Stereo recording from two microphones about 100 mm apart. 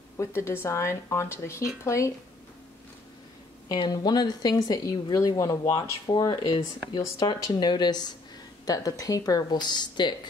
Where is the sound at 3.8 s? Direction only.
45° left (ahead or behind).